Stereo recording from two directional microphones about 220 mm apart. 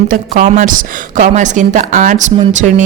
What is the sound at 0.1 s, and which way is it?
Speech, 35° right (ahead or behind).